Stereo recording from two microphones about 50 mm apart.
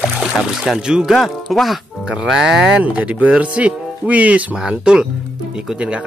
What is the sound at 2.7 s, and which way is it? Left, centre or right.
Speech, right.